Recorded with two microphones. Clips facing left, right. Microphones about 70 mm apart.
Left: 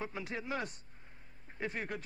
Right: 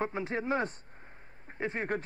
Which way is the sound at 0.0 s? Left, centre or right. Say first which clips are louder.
Right 8 dB; right.